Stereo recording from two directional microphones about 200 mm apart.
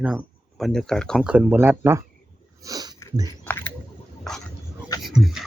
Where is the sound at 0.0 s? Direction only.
5° right (ahead or behind).